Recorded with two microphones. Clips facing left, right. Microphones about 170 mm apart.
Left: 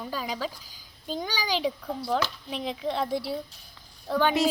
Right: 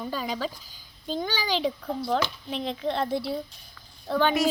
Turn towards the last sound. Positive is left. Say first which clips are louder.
# right 1 dB
turn(degrees=5)  # may be behind; listen again after turning